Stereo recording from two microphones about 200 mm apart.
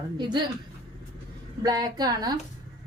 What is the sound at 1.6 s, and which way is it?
Speech, 20° right (ahead or behind).